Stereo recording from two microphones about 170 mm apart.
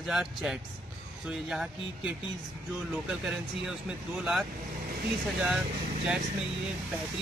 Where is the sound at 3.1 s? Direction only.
5° right (ahead or behind).